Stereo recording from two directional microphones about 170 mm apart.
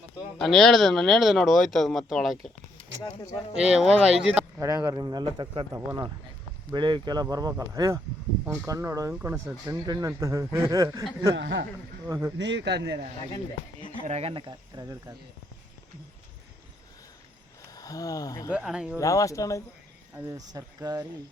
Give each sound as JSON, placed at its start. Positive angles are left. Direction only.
{"t": 0.3, "sound": "speech", "side_deg": 0}
{"t": 3.6, "sound": "speech", "side_deg": -5}
{"t": 4.6, "sound": "speech", "side_deg": -20}
{"t": 5.7, "sound": "speech", "side_deg": -20}
{"t": 11.3, "sound": "speech", "side_deg": -90}
{"t": 12.0, "sound": "speech", "side_deg": -15}
{"t": 12.4, "sound": "a man's voice", "side_deg": -90}
{"t": 14.0, "sound": "speech", "side_deg": -35}
{"t": 17.6, "sound": "speech", "side_deg": 20}
{"t": 18.5, "sound": "speech", "side_deg": -5}
{"t": 18.9, "sound": "speech", "side_deg": 20}
{"t": 20.1, "sound": "speech", "side_deg": -20}